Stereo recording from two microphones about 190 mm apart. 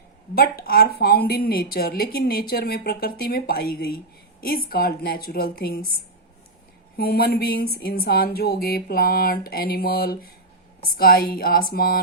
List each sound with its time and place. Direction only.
0.3 s a woman's voice: 55° left (ahead or behind)
6.9 s a woman's voice: 55° left (ahead or behind)